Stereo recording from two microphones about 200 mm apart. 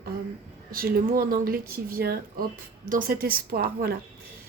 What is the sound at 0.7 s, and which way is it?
Speech, 45° right (ahead or behind).